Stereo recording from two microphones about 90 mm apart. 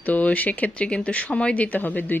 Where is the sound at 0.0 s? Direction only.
15° left (ahead or behind).